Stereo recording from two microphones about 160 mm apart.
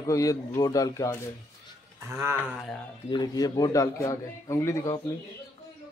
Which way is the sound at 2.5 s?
Centre (ahead or behind).